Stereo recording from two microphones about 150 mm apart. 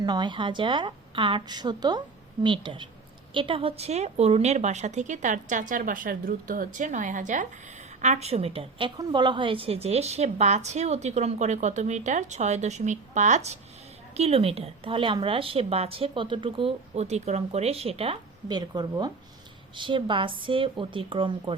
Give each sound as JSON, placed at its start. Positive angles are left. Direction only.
{"t": 0.0, "sound": "a woman's voice", "side_deg": -30}
{"t": 18.5, "sound": "a woman's voice", "side_deg": -25}